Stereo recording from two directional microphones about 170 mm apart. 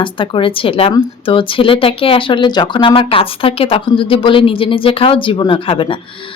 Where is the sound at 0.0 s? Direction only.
30° left (ahead or behind).